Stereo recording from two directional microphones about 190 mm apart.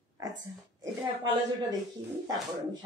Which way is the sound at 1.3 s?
20° right (ahead or behind).